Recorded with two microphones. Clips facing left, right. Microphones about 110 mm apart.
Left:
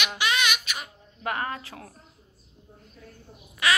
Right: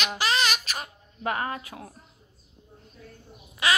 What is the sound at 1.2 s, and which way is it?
Speech, 25° right (ahead or behind).